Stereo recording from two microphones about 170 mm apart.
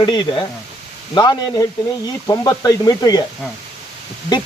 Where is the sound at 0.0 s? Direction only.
25° left (ahead or behind).